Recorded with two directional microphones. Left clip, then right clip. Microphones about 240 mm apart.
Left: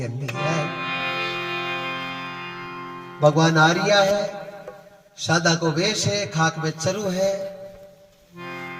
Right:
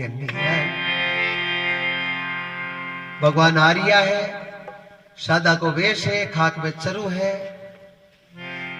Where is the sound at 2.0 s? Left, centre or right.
Centre.